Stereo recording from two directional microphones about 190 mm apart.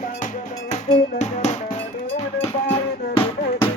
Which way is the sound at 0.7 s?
40° left (ahead or behind).